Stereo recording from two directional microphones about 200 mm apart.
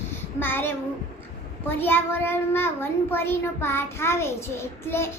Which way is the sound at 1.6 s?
10° left (ahead or behind).